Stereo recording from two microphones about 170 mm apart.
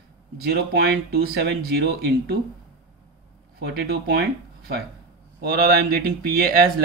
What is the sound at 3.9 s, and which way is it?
Speech, 65° right (ahead or behind).